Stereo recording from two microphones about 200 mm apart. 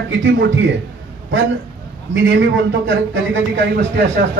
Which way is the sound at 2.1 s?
65° right (ahead or behind).